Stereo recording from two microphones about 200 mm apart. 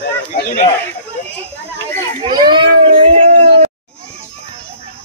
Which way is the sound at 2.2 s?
20° right (ahead or behind).